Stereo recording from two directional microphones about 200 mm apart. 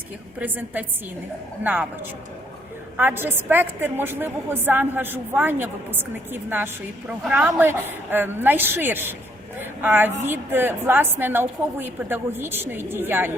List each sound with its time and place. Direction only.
0.3 s a woman's voice: 10° right (ahead or behind)
3.0 s a woman's voice: 10° right (ahead or behind)